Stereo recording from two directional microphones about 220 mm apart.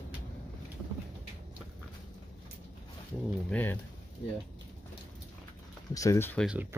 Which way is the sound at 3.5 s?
10° left (ahead or behind).